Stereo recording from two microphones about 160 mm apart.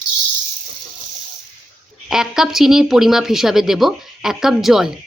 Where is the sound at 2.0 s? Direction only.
5° right (ahead or behind).